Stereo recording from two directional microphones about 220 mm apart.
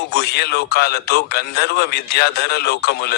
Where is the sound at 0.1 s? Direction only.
50° left (ahead or behind).